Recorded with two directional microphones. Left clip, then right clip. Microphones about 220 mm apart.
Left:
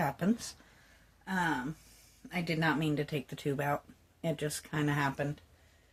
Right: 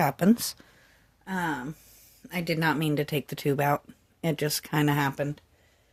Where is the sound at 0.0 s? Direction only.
45° right (ahead or behind).